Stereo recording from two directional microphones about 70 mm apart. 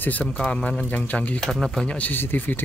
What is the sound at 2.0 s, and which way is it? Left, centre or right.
Speech, left.